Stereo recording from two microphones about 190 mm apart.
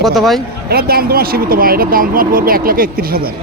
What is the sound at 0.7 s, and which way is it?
Speech, 55° right (ahead or behind).